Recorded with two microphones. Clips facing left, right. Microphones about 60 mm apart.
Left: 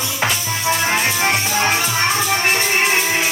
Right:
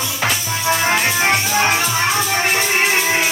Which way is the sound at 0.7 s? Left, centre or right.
Centre.